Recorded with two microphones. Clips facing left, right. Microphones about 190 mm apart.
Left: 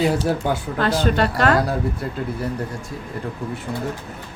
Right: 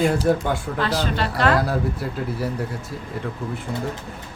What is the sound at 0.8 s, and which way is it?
Speech, 50° left (ahead or behind).